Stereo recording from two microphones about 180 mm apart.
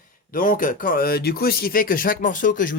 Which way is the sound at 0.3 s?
50° left (ahead or behind).